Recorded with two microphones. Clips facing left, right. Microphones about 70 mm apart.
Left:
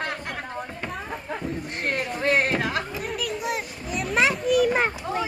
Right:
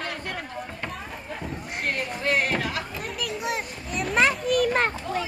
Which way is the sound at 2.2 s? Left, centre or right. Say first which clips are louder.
Left 3 dB; left.